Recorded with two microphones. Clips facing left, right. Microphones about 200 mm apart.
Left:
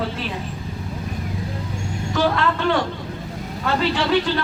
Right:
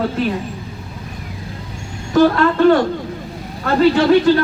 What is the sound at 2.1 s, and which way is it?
Speech, 45° right (ahead or behind).